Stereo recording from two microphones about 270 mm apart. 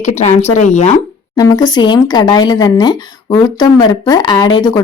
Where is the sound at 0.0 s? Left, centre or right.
Left.